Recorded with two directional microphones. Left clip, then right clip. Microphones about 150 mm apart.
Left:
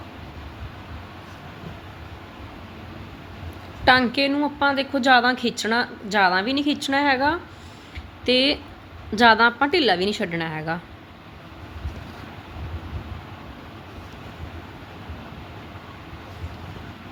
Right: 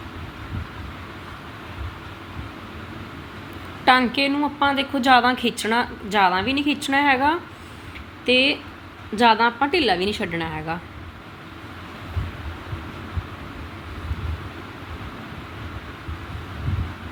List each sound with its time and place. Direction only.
3.8 s a woman's voice: 35° left (ahead or behind)
8.3 s a woman's voice: 45° left (ahead or behind)